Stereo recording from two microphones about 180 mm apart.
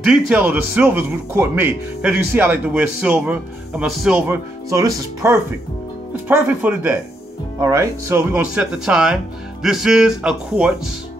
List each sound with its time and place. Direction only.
0.0 s speech: 5° right (ahead or behind)
4.6 s speech: 15° right (ahead or behind)